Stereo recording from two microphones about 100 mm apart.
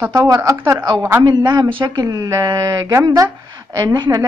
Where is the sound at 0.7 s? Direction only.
45° right (ahead or behind).